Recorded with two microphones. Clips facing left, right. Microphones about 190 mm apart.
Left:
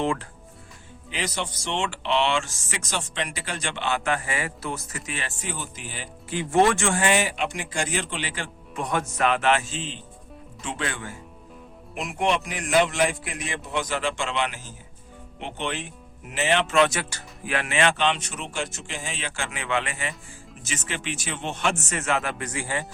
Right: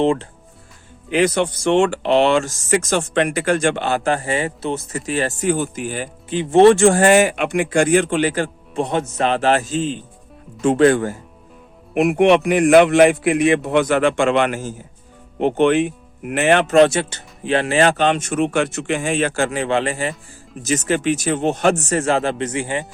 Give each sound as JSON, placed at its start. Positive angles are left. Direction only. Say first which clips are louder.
{"t": 0.0, "sound": "speech", "louder": "right 9 dB", "side_deg": -25}
{"t": 1.1, "sound": "speech", "louder": "right 14 dB", "side_deg": -55}
{"t": 6.3, "sound": "speech", "louder": "right 10 dB", "side_deg": -20}
{"t": 8.7, "sound": "speech", "louder": "right 5 dB", "side_deg": -25}
{"t": 11.9, "sound": "a man's voice", "louder": "right 12 dB", "side_deg": -60}
{"t": 16.6, "sound": "speech", "louder": "right 9 dB", "side_deg": -40}
{"t": 16.9, "sound": "speech", "louder": "right 9 dB", "side_deg": -25}
{"t": 19.5, "sound": "speech", "louder": "right 9 dB", "side_deg": -35}